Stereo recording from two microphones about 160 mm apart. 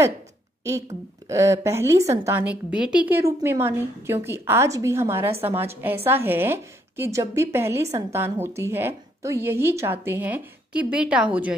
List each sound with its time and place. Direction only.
1.3 s a woman's voice: 20° right (ahead or behind)